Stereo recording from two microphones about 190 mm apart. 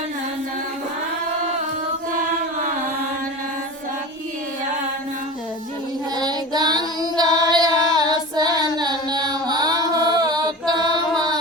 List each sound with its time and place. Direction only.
6.1 s child singing: 20° right (ahead or behind)
8.7 s music: 20° right (ahead or behind)